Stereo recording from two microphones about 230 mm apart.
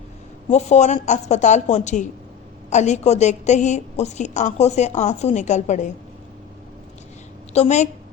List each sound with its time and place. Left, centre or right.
0.5 s a woman's voice: left
7.5 s a woman's voice: left